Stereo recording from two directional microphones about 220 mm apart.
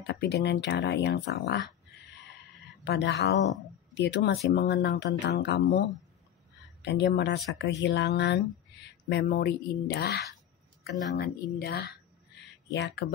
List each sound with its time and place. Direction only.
0.0 s speech: 50° left (ahead or behind)
2.8 s speech: 50° left (ahead or behind)